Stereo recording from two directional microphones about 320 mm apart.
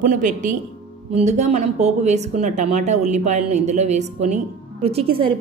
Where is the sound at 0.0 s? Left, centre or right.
Right.